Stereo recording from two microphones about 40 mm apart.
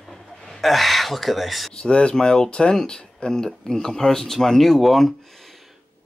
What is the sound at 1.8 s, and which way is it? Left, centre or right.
Speech, left.